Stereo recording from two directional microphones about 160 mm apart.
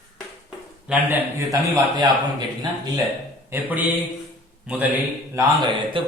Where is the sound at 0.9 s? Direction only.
10° right (ahead or behind).